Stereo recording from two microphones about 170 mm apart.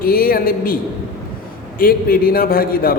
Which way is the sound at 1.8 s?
60° left (ahead or behind).